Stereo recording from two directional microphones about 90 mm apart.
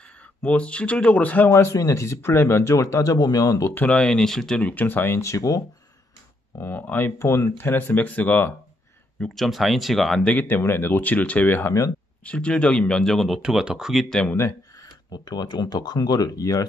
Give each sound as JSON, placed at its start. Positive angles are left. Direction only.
{"t": 0.4, "sound": "speech", "side_deg": 15}
{"t": 1.5, "sound": "speech", "side_deg": 35}
{"t": 3.7, "sound": "speech", "side_deg": 15}
{"t": 6.6, "sound": "speech", "side_deg": 25}
{"t": 7.2, "sound": "speech", "side_deg": 30}
{"t": 9.3, "sound": "speech", "side_deg": 0}
{"t": 10.3, "sound": "speech", "side_deg": 20}
{"t": 13.4, "sound": "speech", "side_deg": -10}
{"t": 14.0, "sound": "speech", "side_deg": 10}
{"t": 15.2, "sound": "speech", "side_deg": 50}